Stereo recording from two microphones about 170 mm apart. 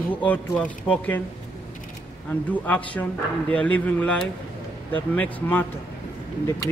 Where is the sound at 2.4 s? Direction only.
10° left (ahead or behind).